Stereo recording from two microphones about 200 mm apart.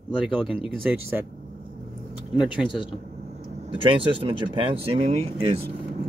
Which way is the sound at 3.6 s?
25° right (ahead or behind).